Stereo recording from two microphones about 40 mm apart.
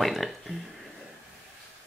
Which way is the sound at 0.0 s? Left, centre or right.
Centre.